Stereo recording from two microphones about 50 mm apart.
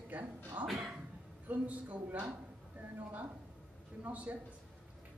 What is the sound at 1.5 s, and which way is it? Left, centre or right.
Speech, right.